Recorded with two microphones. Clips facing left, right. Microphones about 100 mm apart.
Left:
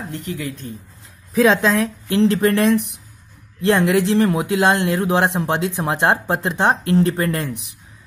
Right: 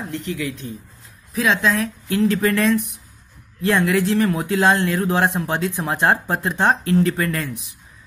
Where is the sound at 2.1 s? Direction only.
20° left (ahead or behind).